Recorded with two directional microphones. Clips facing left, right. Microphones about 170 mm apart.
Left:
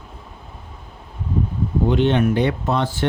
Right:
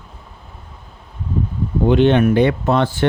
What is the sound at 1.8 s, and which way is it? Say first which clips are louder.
Speech: right 5 dB; 65° right (ahead or behind).